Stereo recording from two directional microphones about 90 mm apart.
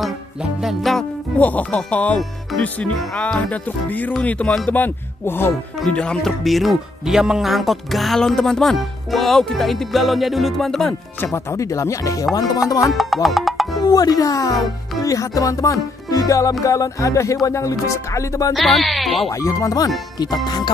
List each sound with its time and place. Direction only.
0.0 s music: 5° right (ahead or behind)
1.4 s speech: 15° left (ahead or behind)
4.7 s speech: 25° left (ahead or behind)
5.8 s speech: 10° left (ahead or behind)
11.3 s speech: 35° left (ahead or behind)
12.9 s music: centre (ahead or behind)
13.7 s speech: 45° left (ahead or behind)
15.0 s music: 40° left (ahead or behind)
16.6 s speech: 35° left (ahead or behind)
18.5 s speech: centre (ahead or behind)
19.3 s speech: 40° left (ahead or behind)
20.4 s speech: 55° left (ahead or behind)